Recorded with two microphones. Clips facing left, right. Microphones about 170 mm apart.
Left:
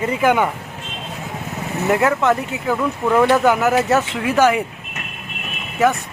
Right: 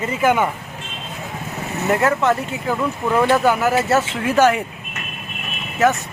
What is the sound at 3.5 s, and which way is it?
Speech, 15° left (ahead or behind).